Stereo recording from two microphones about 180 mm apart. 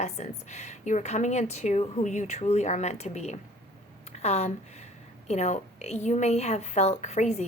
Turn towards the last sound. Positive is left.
turn(degrees=40)  # may be behind; listen again after turning